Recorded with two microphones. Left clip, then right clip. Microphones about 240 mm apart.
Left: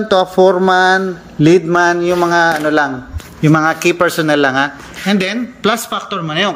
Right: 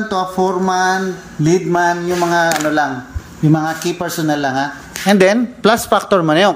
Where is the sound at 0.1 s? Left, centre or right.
Centre.